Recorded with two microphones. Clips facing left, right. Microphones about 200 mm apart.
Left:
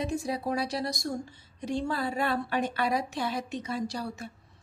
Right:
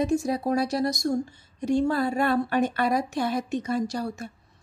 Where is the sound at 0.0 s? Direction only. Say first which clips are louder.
Right 6 dB; 45° right (ahead or behind).